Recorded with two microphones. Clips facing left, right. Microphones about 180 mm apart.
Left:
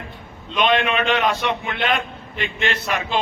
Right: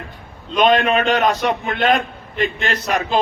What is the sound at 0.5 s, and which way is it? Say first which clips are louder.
A man's voice: right 4 dB; 40° right (ahead or behind).